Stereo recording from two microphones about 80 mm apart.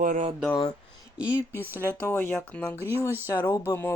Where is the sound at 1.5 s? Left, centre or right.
Left.